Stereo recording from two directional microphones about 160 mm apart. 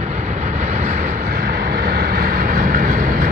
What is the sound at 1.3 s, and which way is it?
Vehicle, 70° right (ahead or behind).